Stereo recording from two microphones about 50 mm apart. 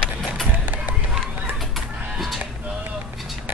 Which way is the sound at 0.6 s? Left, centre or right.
Right.